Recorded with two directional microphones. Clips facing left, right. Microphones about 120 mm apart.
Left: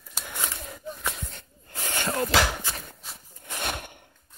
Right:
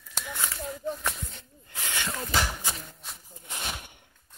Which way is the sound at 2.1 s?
80° left.